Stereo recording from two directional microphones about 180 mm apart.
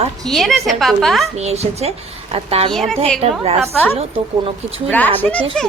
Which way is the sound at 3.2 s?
35° right (ahead or behind).